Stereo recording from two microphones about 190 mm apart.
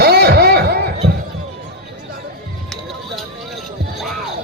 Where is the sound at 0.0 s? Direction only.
55° right (ahead or behind).